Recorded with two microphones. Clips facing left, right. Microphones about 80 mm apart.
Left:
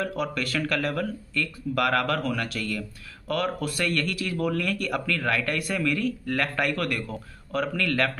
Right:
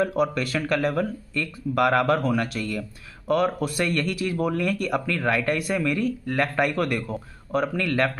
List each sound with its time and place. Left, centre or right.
0.0 s speech: centre